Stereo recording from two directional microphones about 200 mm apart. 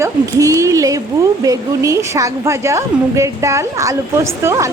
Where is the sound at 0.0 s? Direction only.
15° right (ahead or behind).